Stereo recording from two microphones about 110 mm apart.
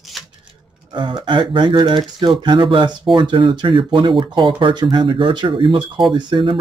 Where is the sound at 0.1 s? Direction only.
Centre (ahead or behind).